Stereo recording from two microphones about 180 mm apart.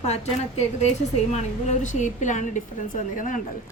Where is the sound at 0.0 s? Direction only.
35° left (ahead or behind).